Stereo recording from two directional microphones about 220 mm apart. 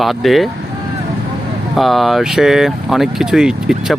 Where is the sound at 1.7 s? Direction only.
Centre (ahead or behind).